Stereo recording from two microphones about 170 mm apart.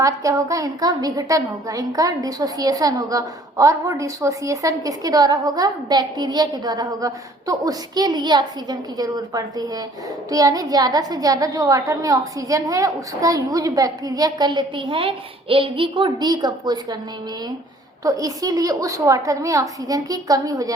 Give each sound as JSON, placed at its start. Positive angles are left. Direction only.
{"t": 0.0, "sound": "a woman's voice", "side_deg": -20}
{"t": 18.0, "sound": "a woman's voice", "side_deg": -20}